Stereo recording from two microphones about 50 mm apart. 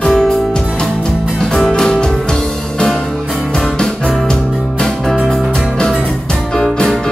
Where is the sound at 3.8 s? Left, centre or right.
Centre.